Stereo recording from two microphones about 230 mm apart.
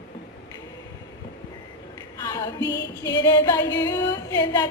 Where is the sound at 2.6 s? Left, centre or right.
Left.